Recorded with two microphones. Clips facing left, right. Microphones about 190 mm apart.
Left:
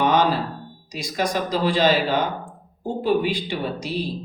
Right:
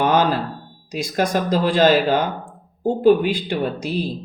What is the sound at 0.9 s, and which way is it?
Speech, 55° right (ahead or behind).